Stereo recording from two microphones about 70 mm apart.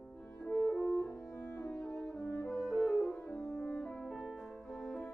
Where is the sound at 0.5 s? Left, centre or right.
Centre.